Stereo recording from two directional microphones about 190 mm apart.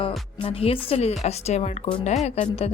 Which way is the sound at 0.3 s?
30° left (ahead or behind).